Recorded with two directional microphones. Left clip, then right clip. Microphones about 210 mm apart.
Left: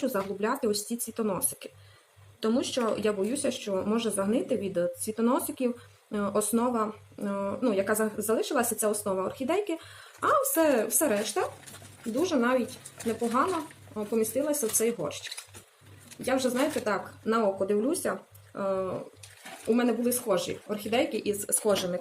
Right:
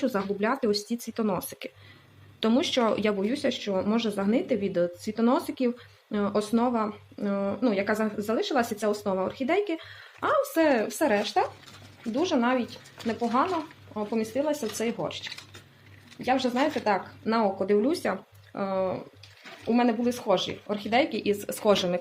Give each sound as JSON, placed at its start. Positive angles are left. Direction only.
{"t": 0.0, "sound": "speech", "side_deg": -35}
{"t": 13.9, "sound": "speech", "side_deg": -25}
{"t": 16.2, "sound": "speech", "side_deg": -25}